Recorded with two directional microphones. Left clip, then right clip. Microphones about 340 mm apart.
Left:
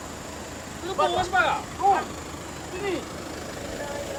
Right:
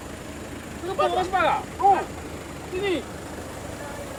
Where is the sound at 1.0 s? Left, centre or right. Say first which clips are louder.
Even; centre.